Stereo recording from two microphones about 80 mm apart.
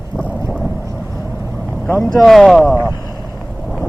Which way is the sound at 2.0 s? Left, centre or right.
Centre.